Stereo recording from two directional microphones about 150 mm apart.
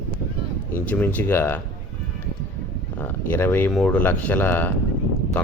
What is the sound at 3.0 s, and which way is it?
Speech, 15° left (ahead or behind).